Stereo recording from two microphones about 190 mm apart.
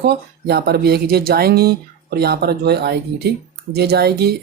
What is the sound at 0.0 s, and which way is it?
Speech, 60° right (ahead or behind).